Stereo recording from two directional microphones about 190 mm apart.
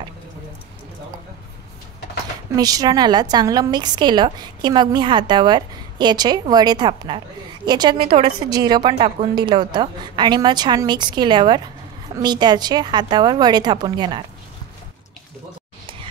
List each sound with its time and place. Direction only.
2.5 s a woman's voice: 20° right (ahead or behind)